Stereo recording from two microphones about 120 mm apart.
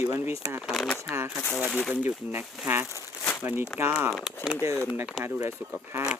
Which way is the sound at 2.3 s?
15° right (ahead or behind).